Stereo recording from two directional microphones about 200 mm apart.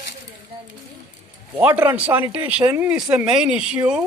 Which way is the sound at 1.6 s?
10° right (ahead or behind).